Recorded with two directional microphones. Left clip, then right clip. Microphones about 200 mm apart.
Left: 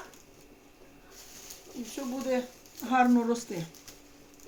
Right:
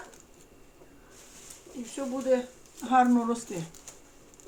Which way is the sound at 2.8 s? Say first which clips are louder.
Right 2 dB; 10° left (ahead or behind).